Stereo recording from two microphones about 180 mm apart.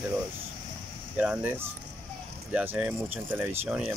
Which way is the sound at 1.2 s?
10° right (ahead or behind).